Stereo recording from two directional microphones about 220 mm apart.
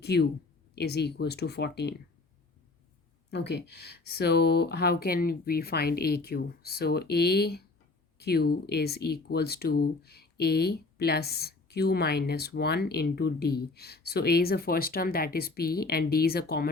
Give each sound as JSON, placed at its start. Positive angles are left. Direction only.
{"t": 0.0, "sound": "speech", "side_deg": 50}
{"t": 3.2, "sound": "speech", "side_deg": 50}